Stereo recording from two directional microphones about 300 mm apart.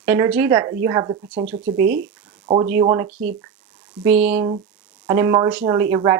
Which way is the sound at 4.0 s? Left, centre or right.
Centre.